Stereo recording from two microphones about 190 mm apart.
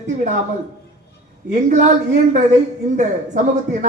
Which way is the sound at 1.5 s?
40° right (ahead or behind).